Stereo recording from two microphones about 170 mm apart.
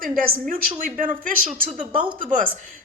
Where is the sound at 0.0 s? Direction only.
50° right (ahead or behind).